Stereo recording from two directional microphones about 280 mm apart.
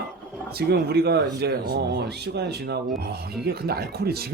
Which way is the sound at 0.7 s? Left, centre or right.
Right.